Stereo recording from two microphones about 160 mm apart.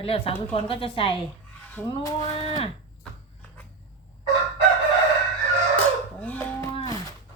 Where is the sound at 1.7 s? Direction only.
15° left (ahead or behind).